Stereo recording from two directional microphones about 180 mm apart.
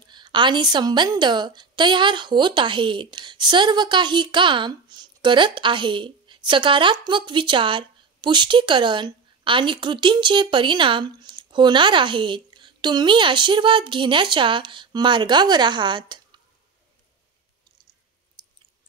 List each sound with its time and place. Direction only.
0.0 s a woman's voice: 25° right (ahead or behind)
18.4 s chewing: 25° right (ahead or behind)